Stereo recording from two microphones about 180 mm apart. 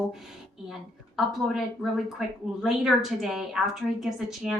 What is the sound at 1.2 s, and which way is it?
A woman's voice, centre (ahead or behind).